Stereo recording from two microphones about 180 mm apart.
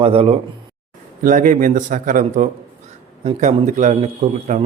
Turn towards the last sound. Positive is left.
turn(degrees=-40)  # may be behind; listen again after turning